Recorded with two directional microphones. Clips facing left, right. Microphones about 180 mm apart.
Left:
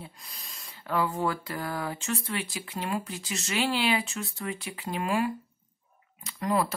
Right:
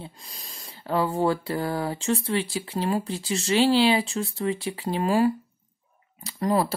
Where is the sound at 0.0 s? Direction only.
30° right (ahead or behind).